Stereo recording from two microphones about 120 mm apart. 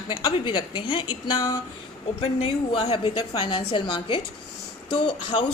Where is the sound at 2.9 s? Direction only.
45° left (ahead or behind).